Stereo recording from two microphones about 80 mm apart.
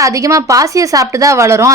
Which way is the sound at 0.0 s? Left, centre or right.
Right.